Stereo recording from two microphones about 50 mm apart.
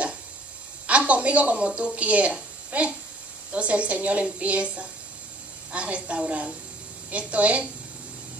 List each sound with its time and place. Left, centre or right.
0.8 s a woman's voice: right